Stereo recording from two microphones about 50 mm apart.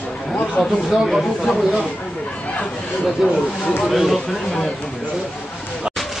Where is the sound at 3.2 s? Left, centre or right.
Centre.